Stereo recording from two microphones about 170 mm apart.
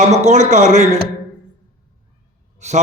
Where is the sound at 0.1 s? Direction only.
40° right (ahead or behind).